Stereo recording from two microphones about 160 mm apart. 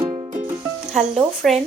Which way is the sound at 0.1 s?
35° right (ahead or behind).